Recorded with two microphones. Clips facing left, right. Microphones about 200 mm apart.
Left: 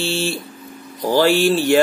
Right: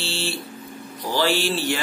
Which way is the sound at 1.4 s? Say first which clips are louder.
Left 9 dB; 45° left (ahead or behind).